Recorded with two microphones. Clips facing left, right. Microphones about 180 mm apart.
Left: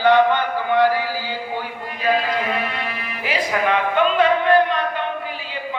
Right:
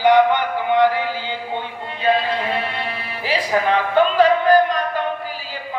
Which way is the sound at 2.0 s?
30° right (ahead or behind).